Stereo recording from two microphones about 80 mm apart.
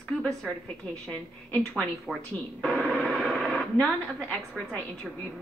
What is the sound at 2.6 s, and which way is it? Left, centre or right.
Speech, centre.